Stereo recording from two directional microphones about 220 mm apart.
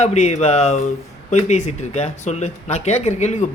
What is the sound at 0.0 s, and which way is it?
Speech, 30° left (ahead or behind).